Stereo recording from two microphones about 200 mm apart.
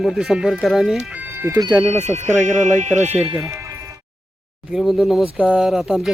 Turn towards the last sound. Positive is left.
turn(degrees=0)  # may be behind; listen again after turning